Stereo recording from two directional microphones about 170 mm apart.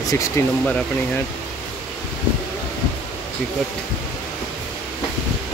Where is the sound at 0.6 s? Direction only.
5° left (ahead or behind).